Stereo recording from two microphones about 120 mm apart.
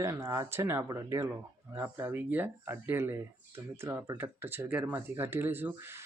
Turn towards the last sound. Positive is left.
turn(degrees=-20)  # may be behind; listen again after turning